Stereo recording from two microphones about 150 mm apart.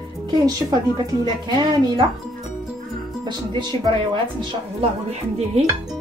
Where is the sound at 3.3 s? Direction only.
30° right (ahead or behind).